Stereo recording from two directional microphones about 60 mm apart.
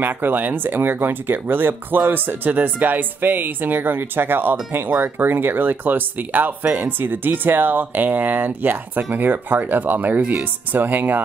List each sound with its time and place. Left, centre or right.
0.0 s speech: right